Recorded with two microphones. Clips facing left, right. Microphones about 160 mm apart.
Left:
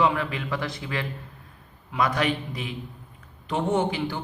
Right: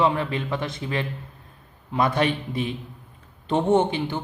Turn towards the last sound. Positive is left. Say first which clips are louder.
# right 4 dB
turn(degrees=-25)  # may be behind; listen again after turning